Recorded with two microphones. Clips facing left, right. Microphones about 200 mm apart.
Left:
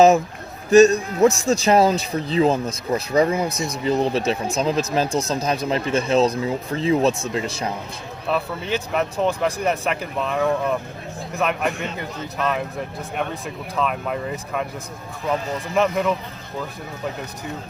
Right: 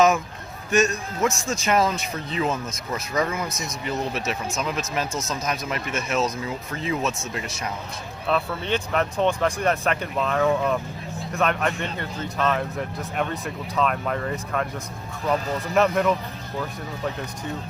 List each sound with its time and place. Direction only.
0.7 s a man's voice: 35° left (ahead or behind)
8.3 s speech: 5° left (ahead or behind)